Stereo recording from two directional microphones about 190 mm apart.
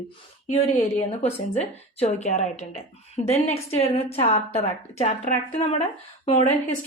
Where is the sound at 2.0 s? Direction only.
35° left (ahead or behind).